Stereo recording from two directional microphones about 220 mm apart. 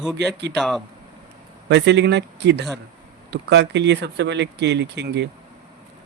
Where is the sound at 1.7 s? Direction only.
50° right (ahead or behind).